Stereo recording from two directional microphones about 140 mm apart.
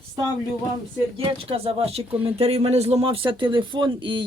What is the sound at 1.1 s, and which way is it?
Speech, 40° right (ahead or behind).